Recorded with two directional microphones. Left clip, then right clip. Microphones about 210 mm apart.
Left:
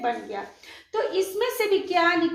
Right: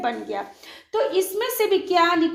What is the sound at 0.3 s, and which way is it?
A woman's voice, 50° right (ahead or behind).